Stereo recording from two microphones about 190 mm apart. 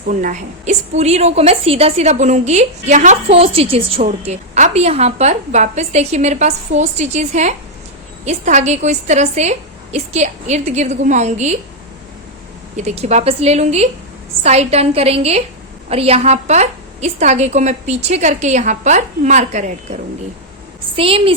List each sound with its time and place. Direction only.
0.1 s a woman's voice: 40° right (ahead or behind)
12.7 s a woman's voice: 35° right (ahead or behind)